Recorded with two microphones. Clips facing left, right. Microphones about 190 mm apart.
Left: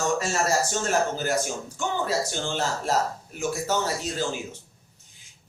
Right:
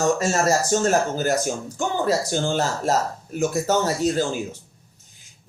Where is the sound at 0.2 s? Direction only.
40° right (ahead or behind).